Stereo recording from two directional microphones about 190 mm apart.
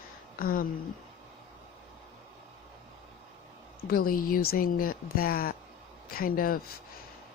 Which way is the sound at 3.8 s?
50° left (ahead or behind).